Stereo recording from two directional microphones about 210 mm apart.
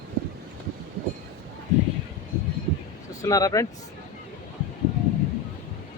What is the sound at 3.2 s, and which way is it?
Speech, 15° left (ahead or behind).